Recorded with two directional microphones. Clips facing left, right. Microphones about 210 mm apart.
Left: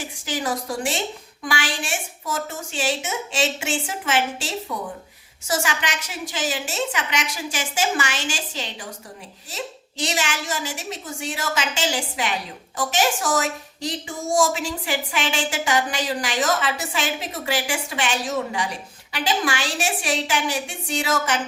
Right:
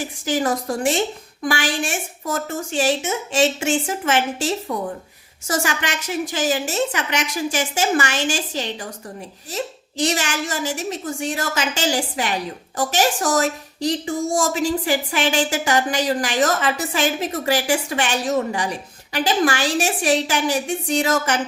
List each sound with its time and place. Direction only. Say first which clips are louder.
0.3 s a woman's voice: right 5 dB; 50° right (ahead or behind)
10.0 s a woman's voice: right 4 dB; 45° right (ahead or behind)